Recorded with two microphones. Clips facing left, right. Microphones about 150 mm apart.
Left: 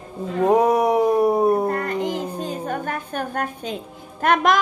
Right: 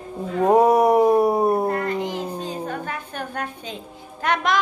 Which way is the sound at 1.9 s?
50° left (ahead or behind).